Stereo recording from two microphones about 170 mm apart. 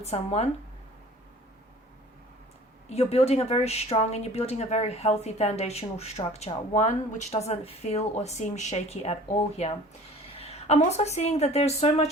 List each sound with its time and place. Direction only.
0.0 s a woman's voice: 40° left (ahead or behind)
2.9 s a woman's voice: 40° left (ahead or behind)
10.3 s a woman's voice: 35° left (ahead or behind)